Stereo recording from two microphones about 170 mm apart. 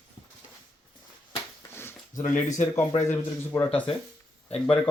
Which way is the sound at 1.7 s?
15° left (ahead or behind).